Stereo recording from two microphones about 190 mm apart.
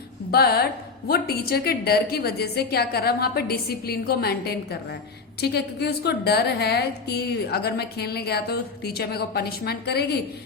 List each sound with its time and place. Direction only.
0.3 s a woman's voice: 55° left (ahead or behind)